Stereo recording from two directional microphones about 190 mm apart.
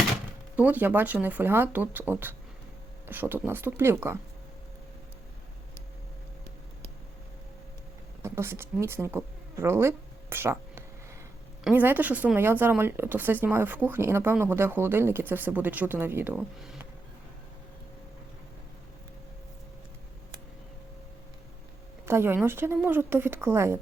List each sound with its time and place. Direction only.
0.5 s speech: 10° right (ahead or behind)
8.2 s speech: 15° right (ahead or behind)
22.0 s speech: 10° right (ahead or behind)